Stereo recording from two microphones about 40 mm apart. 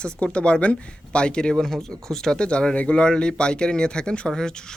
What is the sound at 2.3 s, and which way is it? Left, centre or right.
Speech, left.